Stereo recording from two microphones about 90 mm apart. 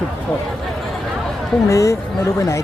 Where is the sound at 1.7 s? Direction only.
35° left (ahead or behind).